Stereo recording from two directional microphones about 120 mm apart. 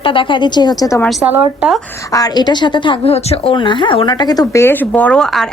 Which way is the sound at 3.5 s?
40° left (ahead or behind).